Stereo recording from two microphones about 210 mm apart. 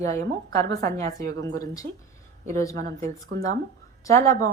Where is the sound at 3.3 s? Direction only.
55° right (ahead or behind).